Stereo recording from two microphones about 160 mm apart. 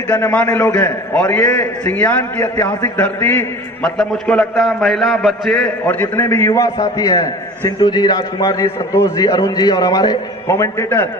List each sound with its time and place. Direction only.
0.1 s a man's voice: 10° left (ahead or behind)